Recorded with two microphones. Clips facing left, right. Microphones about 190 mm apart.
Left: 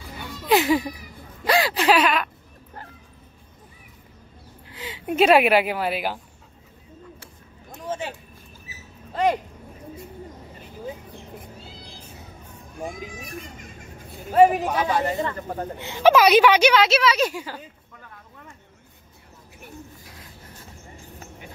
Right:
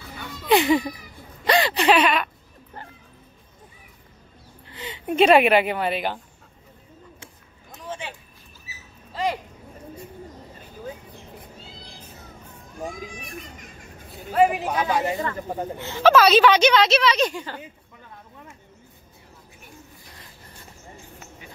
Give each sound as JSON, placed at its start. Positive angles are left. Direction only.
{"t": 0.5, "sound": "a woman's voice", "side_deg": 5}
{"t": 4.6, "sound": "a woman's voice", "side_deg": 5}
{"t": 7.8, "sound": "a sound", "side_deg": 45}
{"t": 14.3, "sound": "a man's voice", "side_deg": 40}
{"t": 14.6, "sound": "a man's voice", "side_deg": -5}
{"t": 15.8, "sound": "a woman's voice", "side_deg": 15}
{"t": 20.1, "sound": "a sound", "side_deg": 5}